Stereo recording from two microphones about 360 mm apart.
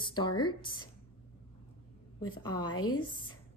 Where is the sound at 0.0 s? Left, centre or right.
Centre.